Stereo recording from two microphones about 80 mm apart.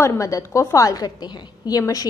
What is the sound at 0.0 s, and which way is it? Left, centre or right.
A woman's voice, left.